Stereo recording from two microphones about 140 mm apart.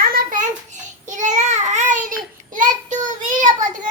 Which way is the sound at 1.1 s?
60° right (ahead or behind).